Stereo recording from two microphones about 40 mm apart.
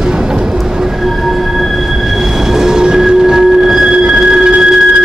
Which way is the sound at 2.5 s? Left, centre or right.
Centre.